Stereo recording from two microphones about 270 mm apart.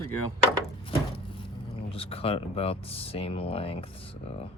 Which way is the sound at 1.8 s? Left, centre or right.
Left.